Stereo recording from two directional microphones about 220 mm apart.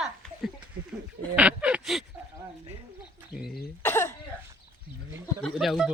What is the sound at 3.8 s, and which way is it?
Speech, 10° left (ahead or behind).